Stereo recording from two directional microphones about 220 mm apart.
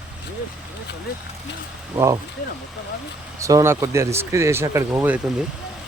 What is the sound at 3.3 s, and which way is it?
Speech, 15° right (ahead or behind).